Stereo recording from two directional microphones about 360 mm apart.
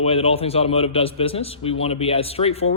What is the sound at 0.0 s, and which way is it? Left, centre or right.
A man's voice, centre.